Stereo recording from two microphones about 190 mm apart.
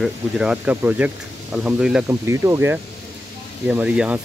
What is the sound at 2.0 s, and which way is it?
Speech, 15° right (ahead or behind).